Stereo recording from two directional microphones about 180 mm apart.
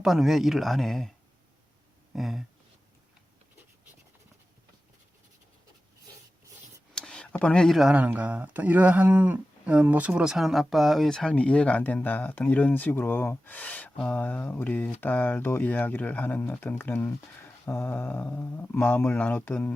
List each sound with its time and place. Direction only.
0.0 s speech: centre (ahead or behind)
2.1 s speech: centre (ahead or behind)
6.9 s speech: 5° left (ahead or behind)